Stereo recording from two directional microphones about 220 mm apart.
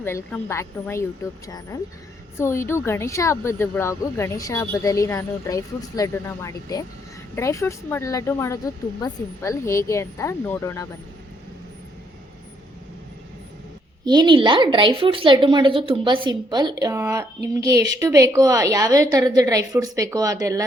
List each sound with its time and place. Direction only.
0.0 s speech: 10° left (ahead or behind)
14.0 s a woman's voice: 20° right (ahead or behind)